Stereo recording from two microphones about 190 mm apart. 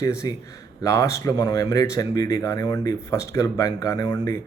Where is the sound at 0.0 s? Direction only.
15° left (ahead or behind).